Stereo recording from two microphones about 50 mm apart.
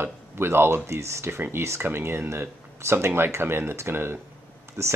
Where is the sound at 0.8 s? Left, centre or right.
Right.